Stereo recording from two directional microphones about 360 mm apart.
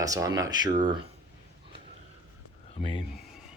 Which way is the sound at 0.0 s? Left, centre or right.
Centre.